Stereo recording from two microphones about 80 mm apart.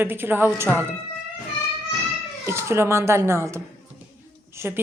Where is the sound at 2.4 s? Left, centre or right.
Right.